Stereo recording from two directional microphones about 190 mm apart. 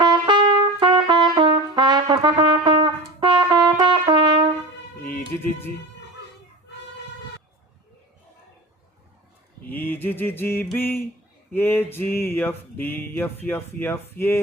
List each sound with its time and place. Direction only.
0.0 s trumpet: 25° right (ahead or behind)
5.4 s speech: 10° left (ahead or behind)
9.6 s mantra: 10° left (ahead or behind)
11.5 s speech: 10° left (ahead or behind)